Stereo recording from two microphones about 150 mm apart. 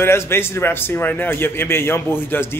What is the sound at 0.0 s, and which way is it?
Speech, 15° left (ahead or behind).